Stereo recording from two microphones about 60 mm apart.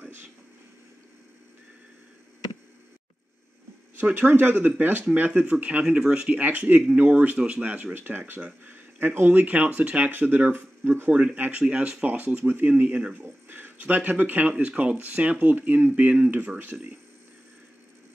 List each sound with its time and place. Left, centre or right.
4.0 s speech: right; by 6.4 s centre
6.4 s speech: right
11.6 s speech: centre; by 16.7 s right